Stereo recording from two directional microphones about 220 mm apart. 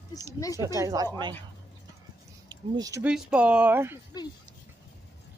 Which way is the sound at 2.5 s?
15° right (ahead or behind).